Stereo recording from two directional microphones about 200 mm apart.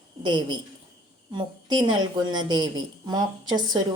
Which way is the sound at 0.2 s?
20° right (ahead or behind).